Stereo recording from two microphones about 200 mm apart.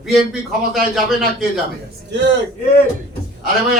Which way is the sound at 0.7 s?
Centre (ahead or behind).